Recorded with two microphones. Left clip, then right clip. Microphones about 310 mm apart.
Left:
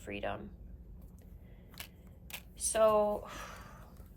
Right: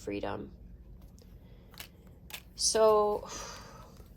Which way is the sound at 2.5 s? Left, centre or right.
Centre.